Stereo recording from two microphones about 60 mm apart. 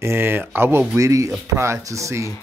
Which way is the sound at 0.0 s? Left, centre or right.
Right.